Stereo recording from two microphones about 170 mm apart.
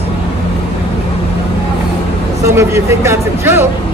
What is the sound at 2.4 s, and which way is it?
Speech, 15° right (ahead or behind).